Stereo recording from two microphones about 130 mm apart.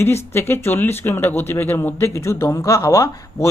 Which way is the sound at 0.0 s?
20° left (ahead or behind).